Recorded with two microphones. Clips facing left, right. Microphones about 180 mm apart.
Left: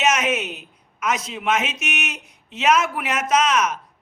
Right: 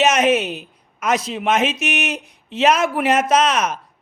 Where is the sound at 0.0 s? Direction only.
30° right (ahead or behind).